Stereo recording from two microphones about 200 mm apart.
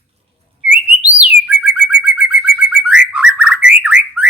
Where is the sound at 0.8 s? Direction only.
5° right (ahead or behind).